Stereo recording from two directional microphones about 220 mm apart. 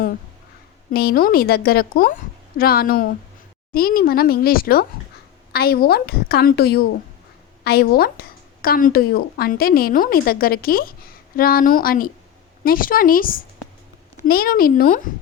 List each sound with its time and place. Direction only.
0.9 s speech: 45° left (ahead or behind)